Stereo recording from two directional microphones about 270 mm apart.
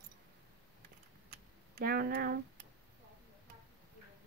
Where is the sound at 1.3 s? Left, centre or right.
Right.